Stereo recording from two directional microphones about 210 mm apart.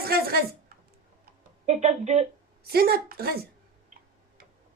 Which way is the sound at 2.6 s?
45° right (ahead or behind).